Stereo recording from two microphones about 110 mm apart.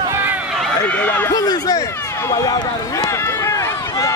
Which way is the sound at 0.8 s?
15° left (ahead or behind).